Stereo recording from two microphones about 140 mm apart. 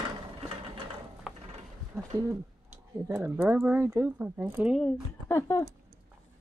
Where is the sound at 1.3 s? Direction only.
5° right (ahead or behind).